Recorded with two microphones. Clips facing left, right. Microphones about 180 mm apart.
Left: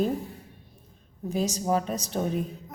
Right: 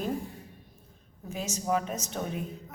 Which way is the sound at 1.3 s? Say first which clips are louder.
Left 5 dB; 35° left (ahead or behind).